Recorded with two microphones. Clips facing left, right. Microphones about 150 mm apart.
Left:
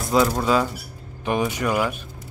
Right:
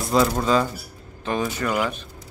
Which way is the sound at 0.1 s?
5° left (ahead or behind).